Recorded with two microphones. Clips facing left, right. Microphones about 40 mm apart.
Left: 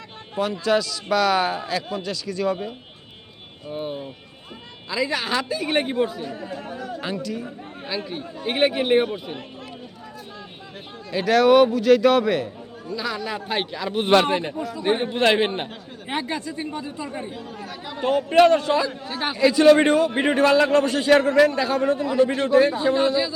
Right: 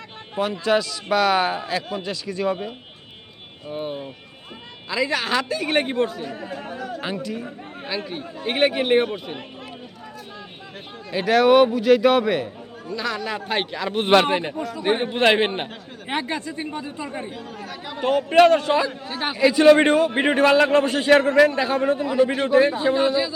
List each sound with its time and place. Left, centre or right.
0.3 s a man's voice: right
3.7 s a man's voice: right
5.8 s speech: right
6.3 s a man's voice: right
7.0 s a man's voice: right
7.4 s speech: right
11.1 s a man's voice: right
12.9 s a man's voice: right
14.1 s a man's voice: right
14.3 s a man's voice: right
19.0 s a man's voice: centre
19.5 s a man's voice: right
22.0 s a man's voice: centre